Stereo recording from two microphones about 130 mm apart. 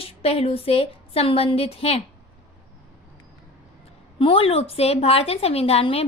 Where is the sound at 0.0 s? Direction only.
50° left (ahead or behind).